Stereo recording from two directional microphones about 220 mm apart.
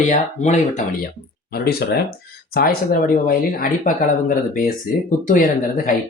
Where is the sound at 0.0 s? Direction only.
35° left (ahead or behind).